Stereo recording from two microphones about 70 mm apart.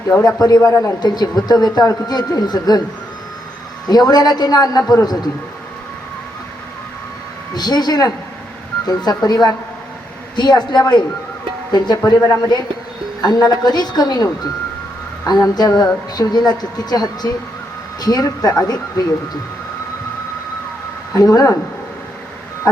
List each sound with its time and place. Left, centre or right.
0.3 s speech: left
0.9 s a man's voice: left
3.8 s a man's voice: left
7.5 s a man's voice: left
10.3 s a woman's voice: left
15.3 s a man's voice: left
21.1 s speech: left
22.7 s speech: left